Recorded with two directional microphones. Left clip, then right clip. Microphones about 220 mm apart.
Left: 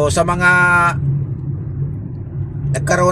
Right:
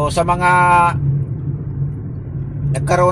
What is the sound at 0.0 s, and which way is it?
Speech, 25° left (ahead or behind).